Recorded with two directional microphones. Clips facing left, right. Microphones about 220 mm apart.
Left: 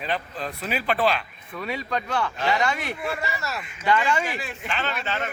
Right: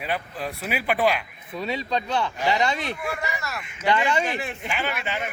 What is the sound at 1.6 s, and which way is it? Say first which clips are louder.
Speech: right 2 dB; 25° right (ahead or behind).